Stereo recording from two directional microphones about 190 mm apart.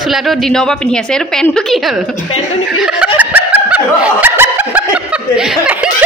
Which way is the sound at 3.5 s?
5° right (ahead or behind).